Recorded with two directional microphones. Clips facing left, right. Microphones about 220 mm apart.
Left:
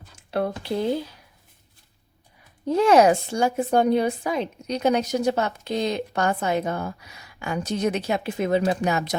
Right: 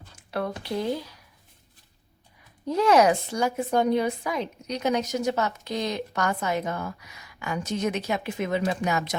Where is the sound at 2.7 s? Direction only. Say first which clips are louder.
Left 3 dB; 25° left (ahead or behind).